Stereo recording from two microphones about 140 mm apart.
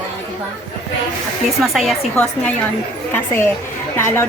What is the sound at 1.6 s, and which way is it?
A woman's voice, centre (ahead or behind).